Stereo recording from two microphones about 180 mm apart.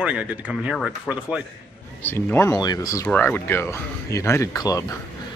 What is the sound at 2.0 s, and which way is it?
Speech, 10° left (ahead or behind).